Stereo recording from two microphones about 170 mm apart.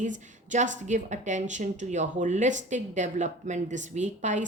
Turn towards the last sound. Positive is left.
turn(degrees=-45)  # may be behind; listen again after turning